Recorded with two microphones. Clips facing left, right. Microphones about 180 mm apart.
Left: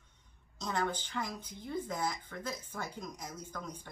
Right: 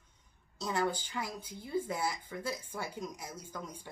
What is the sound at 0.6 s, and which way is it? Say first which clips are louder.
Speech: right 2 dB; 10° right (ahead or behind).